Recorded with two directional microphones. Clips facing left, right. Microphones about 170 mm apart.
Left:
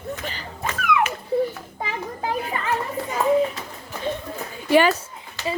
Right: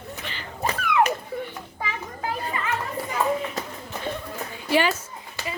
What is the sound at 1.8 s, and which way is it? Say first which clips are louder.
Children playing: left 3 dB; 25° left (ahead or behind).